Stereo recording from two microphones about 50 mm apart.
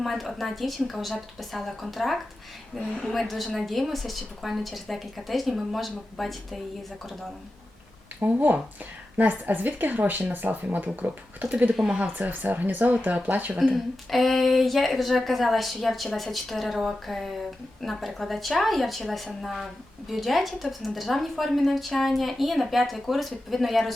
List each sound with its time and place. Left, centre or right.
0.0 s a woman's voice: centre
8.2 s speech: right
12.0 s speech: right
13.7 s a woman's voice: centre